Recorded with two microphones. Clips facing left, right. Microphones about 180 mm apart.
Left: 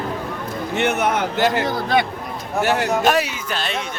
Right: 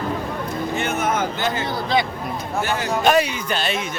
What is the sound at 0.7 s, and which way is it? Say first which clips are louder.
Speech: left 4 dB; 70° left (ahead or behind).